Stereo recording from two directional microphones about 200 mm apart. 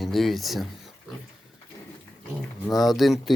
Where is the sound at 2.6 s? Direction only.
Centre (ahead or behind).